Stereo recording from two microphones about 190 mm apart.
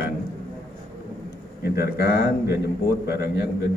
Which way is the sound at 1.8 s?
55° left (ahead or behind).